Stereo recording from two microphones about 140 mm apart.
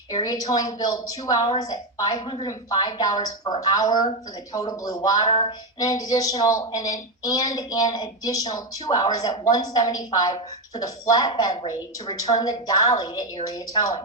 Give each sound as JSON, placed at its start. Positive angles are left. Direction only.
{"t": 0.1, "sound": "a woman's voice", "side_deg": 25}
{"t": 5.3, "sound": "a sound", "side_deg": 40}
{"t": 5.8, "sound": "a woman's voice", "side_deg": 25}